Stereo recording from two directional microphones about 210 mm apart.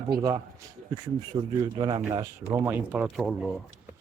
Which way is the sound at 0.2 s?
20° right (ahead or behind).